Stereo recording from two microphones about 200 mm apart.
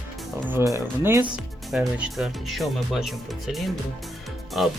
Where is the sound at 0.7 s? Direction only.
15° right (ahead or behind).